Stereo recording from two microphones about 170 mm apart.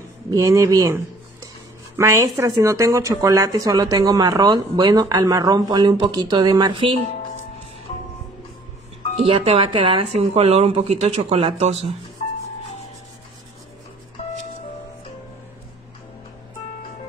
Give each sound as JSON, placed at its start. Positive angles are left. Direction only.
{"t": 0.3, "sound": "speech", "side_deg": -20}
{"t": 9.2, "sound": "speech", "side_deg": -35}